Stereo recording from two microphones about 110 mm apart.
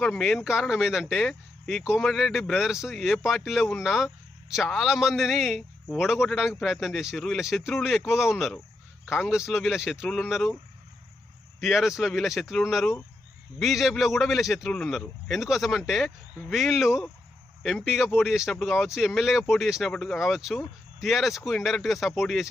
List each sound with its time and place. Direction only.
0.0 s speech: 5° left (ahead or behind)
9.0 s a man's voice: 20° left (ahead or behind)
9.3 s speech: 5° right (ahead or behind)
11.6 s speech: centre (ahead or behind)